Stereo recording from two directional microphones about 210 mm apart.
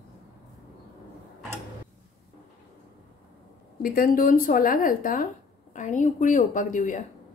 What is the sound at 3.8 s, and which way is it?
Speech, 45° left (ahead or behind).